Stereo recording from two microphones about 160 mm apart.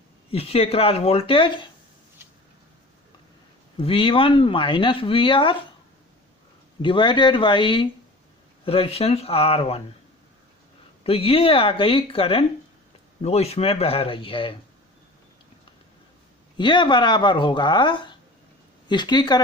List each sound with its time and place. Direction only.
0.3 s speech: 40° left (ahead or behind)
3.8 s speech: 35° left (ahead or behind)
6.8 s speech: 30° left (ahead or behind)
11.0 s speech: 35° left (ahead or behind)
16.6 s speech: 30° left (ahead or behind)